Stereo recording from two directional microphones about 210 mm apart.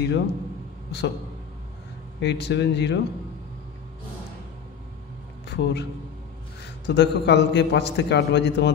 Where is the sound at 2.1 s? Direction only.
55° left (ahead or behind).